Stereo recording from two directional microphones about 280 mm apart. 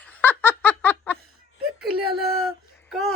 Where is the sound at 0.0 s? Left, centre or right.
Centre.